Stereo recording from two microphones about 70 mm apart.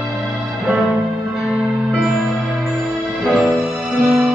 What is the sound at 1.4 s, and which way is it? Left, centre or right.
Music, centre.